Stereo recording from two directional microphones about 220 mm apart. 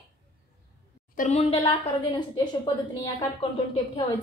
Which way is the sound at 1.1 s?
30° left (ahead or behind).